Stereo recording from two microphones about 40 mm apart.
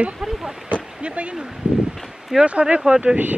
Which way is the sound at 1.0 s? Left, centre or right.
Right.